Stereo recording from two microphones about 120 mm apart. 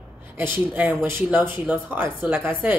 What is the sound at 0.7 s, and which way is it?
Speech, 15° right (ahead or behind).